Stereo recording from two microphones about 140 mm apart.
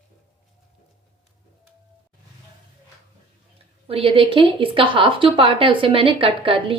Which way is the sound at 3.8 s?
40° right (ahead or behind).